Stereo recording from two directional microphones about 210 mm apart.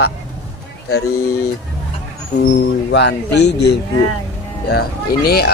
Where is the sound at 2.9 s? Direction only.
55° left (ahead or behind).